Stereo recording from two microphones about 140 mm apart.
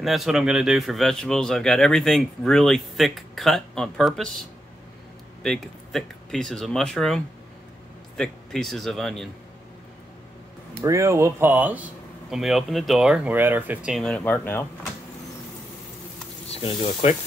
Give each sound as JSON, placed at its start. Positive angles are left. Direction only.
{"t": 0.0, "sound": "a man's voice", "side_deg": 0}
{"t": 5.4, "sound": "a man's voice", "side_deg": 0}
{"t": 10.8, "sound": "speech", "side_deg": -20}
{"t": 12.3, "sound": "a man's voice", "side_deg": -5}
{"t": 13.9, "sound": "speech", "side_deg": 5}
{"t": 16.4, "sound": "speech", "side_deg": 40}